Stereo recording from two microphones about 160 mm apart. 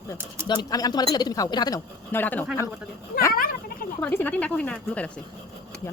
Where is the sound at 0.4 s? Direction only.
25° left (ahead or behind).